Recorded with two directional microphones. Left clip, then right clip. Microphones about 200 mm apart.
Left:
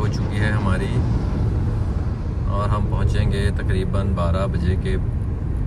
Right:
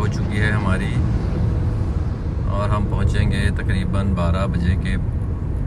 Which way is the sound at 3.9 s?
10° left (ahead or behind).